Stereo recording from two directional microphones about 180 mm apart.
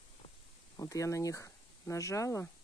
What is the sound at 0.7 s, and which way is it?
Speech, 15° left (ahead or behind).